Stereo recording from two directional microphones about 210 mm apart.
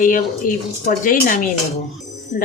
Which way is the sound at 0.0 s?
40° left (ahead or behind).